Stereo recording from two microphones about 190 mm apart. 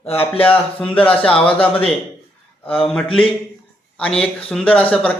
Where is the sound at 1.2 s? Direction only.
30° left (ahead or behind).